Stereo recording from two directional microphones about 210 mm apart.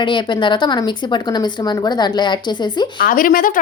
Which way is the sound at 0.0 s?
20° left (ahead or behind).